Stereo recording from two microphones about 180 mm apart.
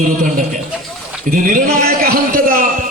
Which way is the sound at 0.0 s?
50° right (ahead or behind).